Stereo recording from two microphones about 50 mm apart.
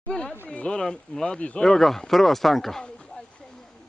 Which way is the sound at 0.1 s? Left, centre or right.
Centre.